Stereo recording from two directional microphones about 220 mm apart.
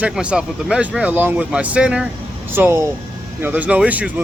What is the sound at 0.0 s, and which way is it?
Speech, 5° right (ahead or behind).